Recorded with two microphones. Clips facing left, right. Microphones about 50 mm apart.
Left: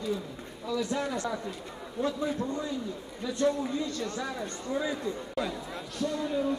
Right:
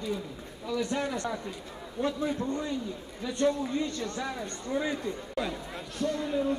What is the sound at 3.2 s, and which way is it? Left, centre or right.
A man's voice, right.